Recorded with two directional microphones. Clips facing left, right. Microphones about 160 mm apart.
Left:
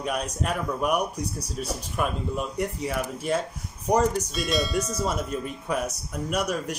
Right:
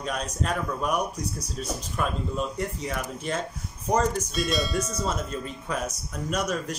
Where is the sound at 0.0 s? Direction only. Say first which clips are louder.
Left 2 dB; 10° left (ahead or behind).